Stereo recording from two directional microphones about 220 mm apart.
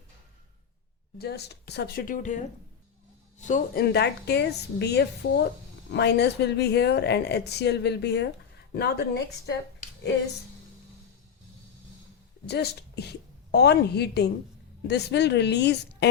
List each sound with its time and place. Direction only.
1.2 s speech: 45° left (ahead or behind)
3.4 s speech: 40° left (ahead or behind)
12.5 s speech: 50° left (ahead or behind)